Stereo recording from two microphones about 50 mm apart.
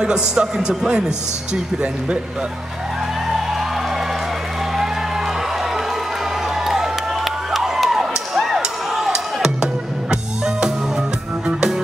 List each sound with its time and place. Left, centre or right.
0.0 s a man's voice: centre
6.6 s crowd: centre
7.5 s a sound: centre
8.4 s music: centre